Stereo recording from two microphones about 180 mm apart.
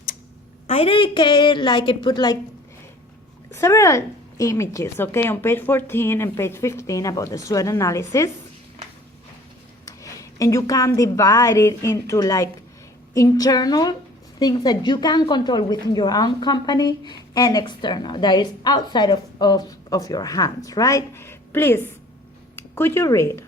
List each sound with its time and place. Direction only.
0.7 s a woman's voice: 30° left (ahead or behind)
3.5 s a woman's voice: 15° left (ahead or behind)
9.8 s a woman's voice: 15° left (ahead or behind)